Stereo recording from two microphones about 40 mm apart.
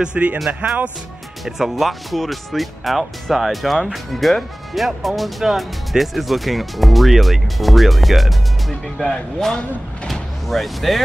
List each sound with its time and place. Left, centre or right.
0.0 s speech: right
1.4 s speech: centre